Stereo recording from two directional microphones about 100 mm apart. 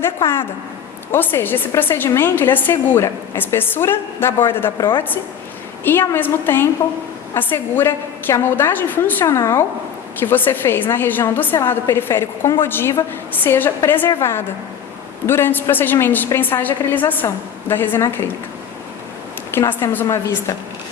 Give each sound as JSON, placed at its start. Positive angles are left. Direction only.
{"t": 0.0, "sound": "a woman's voice", "side_deg": 25}
{"t": 19.5, "sound": "a woman's voice", "side_deg": 25}